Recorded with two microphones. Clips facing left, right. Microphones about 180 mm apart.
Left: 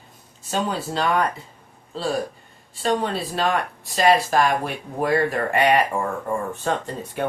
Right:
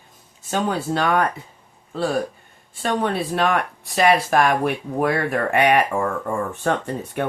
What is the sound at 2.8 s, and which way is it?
Speech, 55° right (ahead or behind).